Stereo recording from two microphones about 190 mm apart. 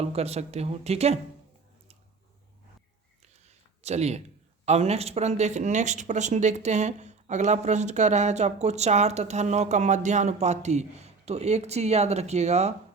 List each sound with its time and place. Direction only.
0.0 s speech: 35° right (ahead or behind)
3.8 s speech: 35° right (ahead or behind)